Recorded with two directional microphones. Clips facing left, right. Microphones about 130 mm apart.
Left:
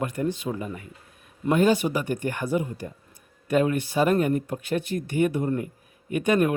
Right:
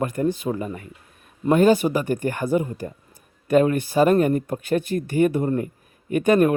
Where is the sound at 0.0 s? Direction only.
45° right (ahead or behind).